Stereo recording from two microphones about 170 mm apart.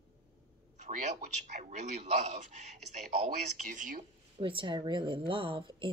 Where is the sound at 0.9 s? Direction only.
50° right (ahead or behind).